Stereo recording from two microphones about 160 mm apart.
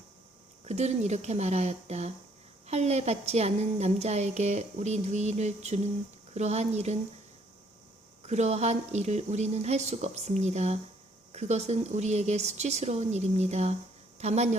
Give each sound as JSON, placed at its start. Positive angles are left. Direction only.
{"t": 0.6, "sound": "a woman's voice", "side_deg": -45}
{"t": 8.3, "sound": "a woman's voice", "side_deg": -45}